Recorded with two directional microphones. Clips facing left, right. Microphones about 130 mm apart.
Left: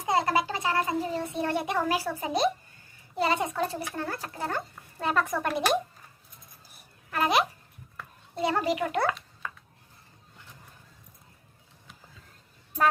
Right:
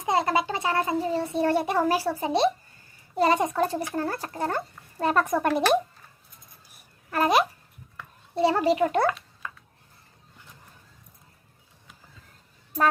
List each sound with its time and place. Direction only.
0.0 s a child's voice: 25° right (ahead or behind)
3.2 s a child's voice: 40° right (ahead or behind)
7.1 s a child's voice: 40° right (ahead or behind)
8.4 s a child's voice: 30° right (ahead or behind)